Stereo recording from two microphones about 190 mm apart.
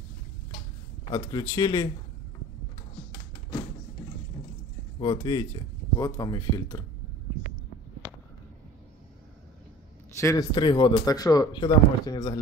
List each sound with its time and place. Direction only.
1.1 s speech: 20° left (ahead or behind)
5.0 s speech: 25° left (ahead or behind)
10.1 s speech: 15° left (ahead or behind)